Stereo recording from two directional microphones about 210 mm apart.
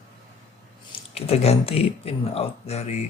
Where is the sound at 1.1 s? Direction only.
30° left (ahead or behind).